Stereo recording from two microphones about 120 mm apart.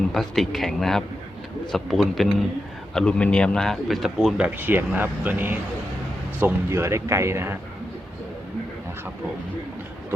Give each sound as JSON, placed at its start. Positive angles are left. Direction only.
{"t": 0.1, "sound": "speech", "side_deg": 0}